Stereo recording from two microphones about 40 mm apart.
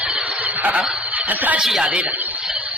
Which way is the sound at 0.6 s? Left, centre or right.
Right.